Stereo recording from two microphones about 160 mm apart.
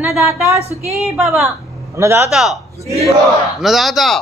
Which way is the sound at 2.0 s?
15° right (ahead or behind).